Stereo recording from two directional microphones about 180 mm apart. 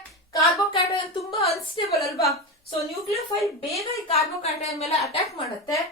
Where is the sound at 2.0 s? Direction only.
Centre (ahead or behind).